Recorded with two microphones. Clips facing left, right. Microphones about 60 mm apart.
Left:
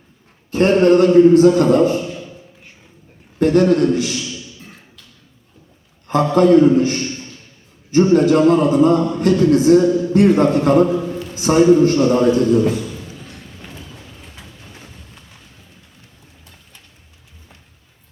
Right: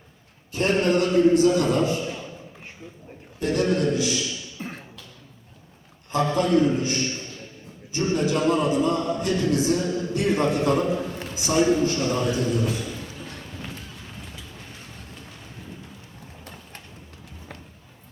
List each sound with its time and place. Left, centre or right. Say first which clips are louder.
0.5 s a man's voice: left 9 dB; left
3.4 s a man's voice: left 9 dB; left
4.6 s beatboxing: right 6 dB; right
6.1 s a man's voice: left 9 dB; left
7.9 s music: left 12 dB; left
10.5 s a man's voice: left 7 dB; left
11.3 s music: left 9 dB; left